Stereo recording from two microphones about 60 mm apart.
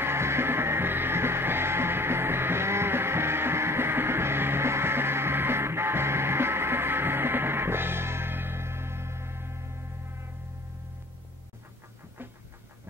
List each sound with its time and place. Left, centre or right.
0.0 s music: right